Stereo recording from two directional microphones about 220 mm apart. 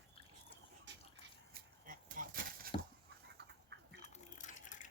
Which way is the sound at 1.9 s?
40° right (ahead or behind).